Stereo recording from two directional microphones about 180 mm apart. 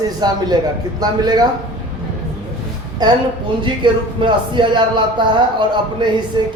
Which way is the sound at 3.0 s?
25° right (ahead or behind).